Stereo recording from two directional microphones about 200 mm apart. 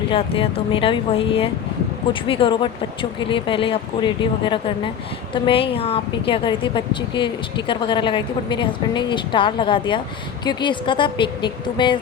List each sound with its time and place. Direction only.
0.1 s a woman's voice: 25° left (ahead or behind)